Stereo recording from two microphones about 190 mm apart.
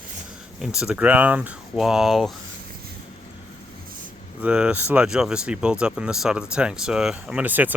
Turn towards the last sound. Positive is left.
turn(degrees=-10)  # may be behind; listen again after turning